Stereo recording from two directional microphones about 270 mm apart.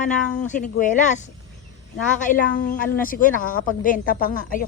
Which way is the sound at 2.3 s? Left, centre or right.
Left.